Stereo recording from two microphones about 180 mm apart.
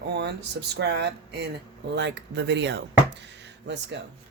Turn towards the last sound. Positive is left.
turn(degrees=-75)  # may be behind; listen again after turning